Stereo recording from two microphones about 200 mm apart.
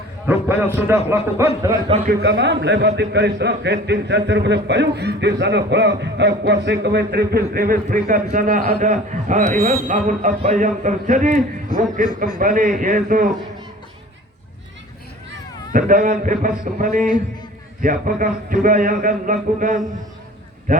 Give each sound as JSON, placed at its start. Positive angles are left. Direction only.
{"t": 0.3, "sound": "a man's voice", "side_deg": -10}
{"t": 2.2, "sound": "a man's voice", "side_deg": -60}
{"t": 15.7, "sound": "a man's voice", "side_deg": -40}